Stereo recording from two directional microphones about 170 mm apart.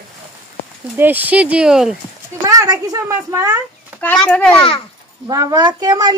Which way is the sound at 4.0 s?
10° left (ahead or behind).